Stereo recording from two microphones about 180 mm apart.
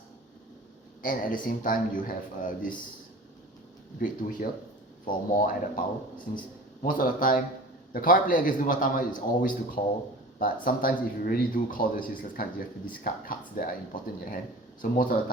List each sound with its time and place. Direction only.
1.0 s speech: 50° left (ahead or behind)
4.0 s speech: 50° left (ahead or behind)
6.8 s speech: 50° left (ahead or behind)